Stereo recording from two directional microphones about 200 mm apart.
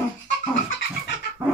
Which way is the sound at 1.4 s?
25° right (ahead or behind).